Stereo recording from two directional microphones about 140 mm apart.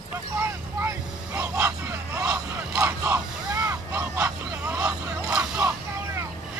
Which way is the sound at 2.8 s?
15° right (ahead or behind).